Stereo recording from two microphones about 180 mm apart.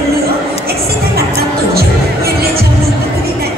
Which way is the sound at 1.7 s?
60° right (ahead or behind).